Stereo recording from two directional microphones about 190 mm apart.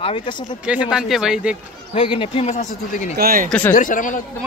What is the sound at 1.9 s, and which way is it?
Speech, 25° left (ahead or behind).